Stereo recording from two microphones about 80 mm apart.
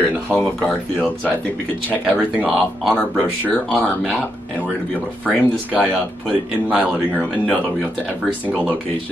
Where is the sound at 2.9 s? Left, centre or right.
Left.